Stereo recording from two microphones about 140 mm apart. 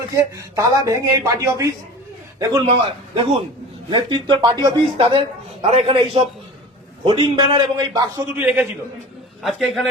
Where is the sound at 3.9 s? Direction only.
30° right (ahead or behind).